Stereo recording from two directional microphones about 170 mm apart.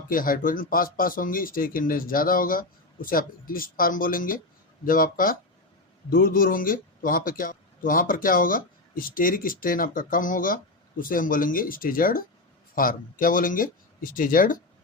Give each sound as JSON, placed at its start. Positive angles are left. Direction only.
{"t": 0.1, "sound": "a man's voice", "side_deg": 55}